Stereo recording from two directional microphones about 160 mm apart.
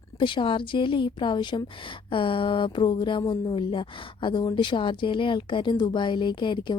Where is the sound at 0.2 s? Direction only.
30° left (ahead or behind).